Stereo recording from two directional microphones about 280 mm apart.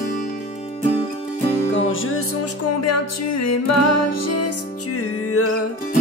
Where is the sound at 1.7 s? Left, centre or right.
Left.